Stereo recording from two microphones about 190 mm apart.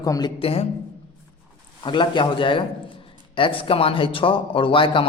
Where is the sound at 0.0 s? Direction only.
20° left (ahead or behind).